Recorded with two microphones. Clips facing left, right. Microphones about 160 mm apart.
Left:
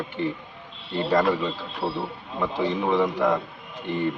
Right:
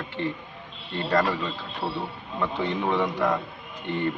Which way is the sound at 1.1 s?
5° left (ahead or behind).